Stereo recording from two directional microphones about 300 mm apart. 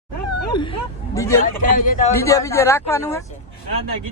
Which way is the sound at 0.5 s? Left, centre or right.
Centre.